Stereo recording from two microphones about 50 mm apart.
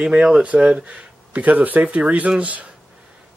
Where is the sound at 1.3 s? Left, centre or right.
Right.